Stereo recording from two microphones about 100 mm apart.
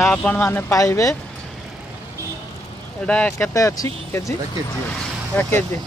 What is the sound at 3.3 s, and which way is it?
Speech, 30° left (ahead or behind).